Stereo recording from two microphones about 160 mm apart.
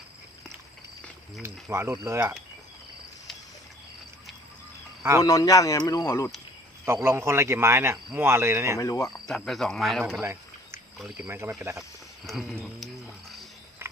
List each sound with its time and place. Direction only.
1.7 s speech: 15° right (ahead or behind)
5.2 s speech: 20° left (ahead or behind)
6.8 s speech: 15° right (ahead or behind)
8.8 s speech: 20° left (ahead or behind)
9.2 s speech: centre (ahead or behind)
11.3 s speech: 15° right (ahead or behind)
11.8 s a sound: centre (ahead or behind)